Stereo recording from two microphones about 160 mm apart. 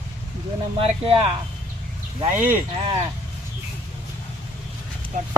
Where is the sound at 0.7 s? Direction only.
35° right (ahead or behind).